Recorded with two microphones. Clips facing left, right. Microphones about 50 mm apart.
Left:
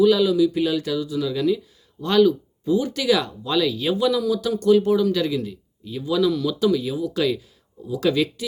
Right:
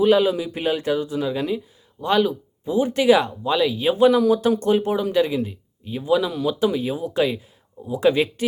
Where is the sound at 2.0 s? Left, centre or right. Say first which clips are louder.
Left 2 dB; centre.